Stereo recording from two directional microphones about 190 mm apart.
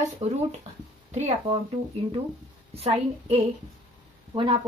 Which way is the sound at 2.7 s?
30° right (ahead or behind).